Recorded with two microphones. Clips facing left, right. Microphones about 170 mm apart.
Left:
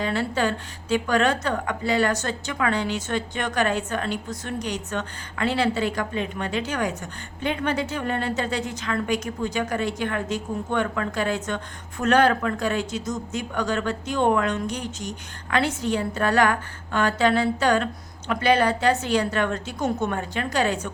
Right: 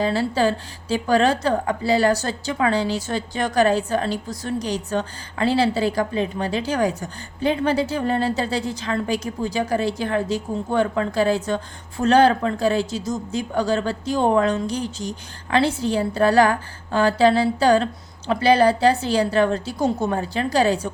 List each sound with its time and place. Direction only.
0.0 s a woman's voice: 30° right (ahead or behind)